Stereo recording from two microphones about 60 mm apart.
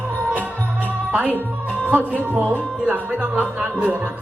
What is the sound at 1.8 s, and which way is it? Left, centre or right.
Music, right.